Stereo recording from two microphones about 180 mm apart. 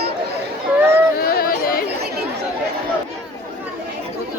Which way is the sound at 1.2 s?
55° left (ahead or behind).